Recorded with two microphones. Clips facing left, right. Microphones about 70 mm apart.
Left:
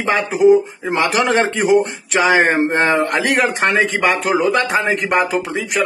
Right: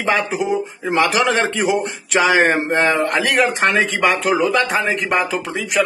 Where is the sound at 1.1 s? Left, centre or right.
Left.